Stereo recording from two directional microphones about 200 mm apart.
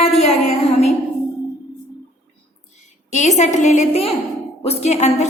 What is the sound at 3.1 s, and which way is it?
A woman's voice, 35° left (ahead or behind).